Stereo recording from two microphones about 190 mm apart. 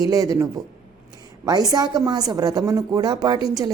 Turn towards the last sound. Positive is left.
turn(degrees=-20)  # may be behind; listen again after turning